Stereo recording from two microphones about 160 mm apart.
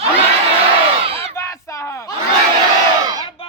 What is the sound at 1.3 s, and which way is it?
Battle cry, 20° left (ahead or behind).